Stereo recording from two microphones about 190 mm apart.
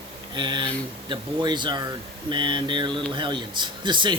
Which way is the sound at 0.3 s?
25° right (ahead or behind).